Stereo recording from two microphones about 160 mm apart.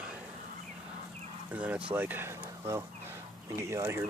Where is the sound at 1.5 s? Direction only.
10° right (ahead or behind).